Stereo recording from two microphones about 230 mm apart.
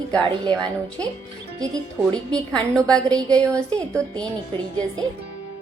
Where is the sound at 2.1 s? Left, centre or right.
Centre.